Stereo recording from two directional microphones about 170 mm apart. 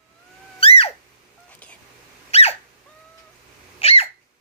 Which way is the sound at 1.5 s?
10° left (ahead or behind).